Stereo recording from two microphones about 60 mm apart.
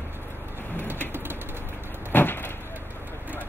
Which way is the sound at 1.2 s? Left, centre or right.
Right.